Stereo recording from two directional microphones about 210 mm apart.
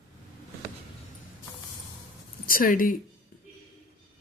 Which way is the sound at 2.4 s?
40° left (ahead or behind).